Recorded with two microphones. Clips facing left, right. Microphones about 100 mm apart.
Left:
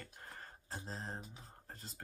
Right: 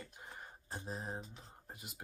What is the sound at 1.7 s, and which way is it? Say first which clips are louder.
Speech: right 1 dB; 10° right (ahead or behind).